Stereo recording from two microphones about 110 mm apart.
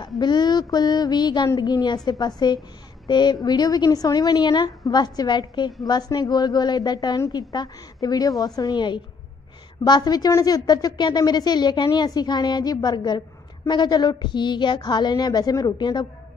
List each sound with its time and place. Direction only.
0.0 s a woman's voice: 40° left (ahead or behind)